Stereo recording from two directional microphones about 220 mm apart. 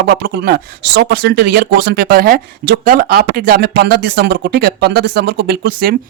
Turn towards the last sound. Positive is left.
turn(degrees=-45)  # may be behind; listen again after turning